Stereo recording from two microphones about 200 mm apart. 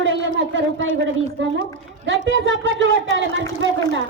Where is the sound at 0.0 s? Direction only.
70° right (ahead or behind).